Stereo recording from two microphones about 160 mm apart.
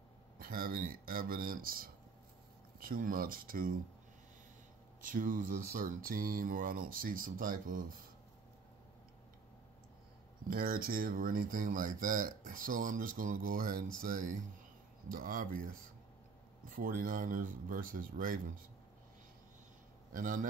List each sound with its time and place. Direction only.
0.4 s speech: 65° right (ahead or behind)
5.0 s speech: 55° right (ahead or behind)
10.5 s speech: 65° right (ahead or behind)
20.1 s a man's voice: 55° right (ahead or behind)